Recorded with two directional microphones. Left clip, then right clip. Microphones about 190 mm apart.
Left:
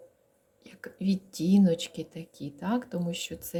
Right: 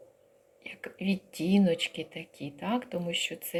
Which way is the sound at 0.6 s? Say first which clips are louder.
Even; 45° left (ahead or behind).